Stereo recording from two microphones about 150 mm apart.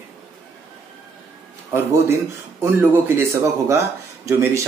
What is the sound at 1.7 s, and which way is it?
Speech, 15° right (ahead or behind).